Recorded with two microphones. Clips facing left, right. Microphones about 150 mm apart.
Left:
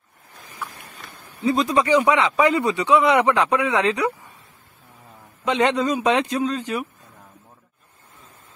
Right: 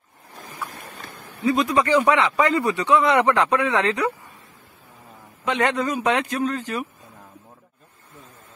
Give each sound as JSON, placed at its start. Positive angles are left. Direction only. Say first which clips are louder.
{"t": 1.4, "sound": "a man's voice", "louder": "even", "side_deg": 30}
{"t": 1.9, "sound": "a man's voice", "louder": "left 1 dB", "side_deg": 15}
{"t": 5.4, "sound": "a man's voice", "louder": "left 2 dB", "side_deg": 20}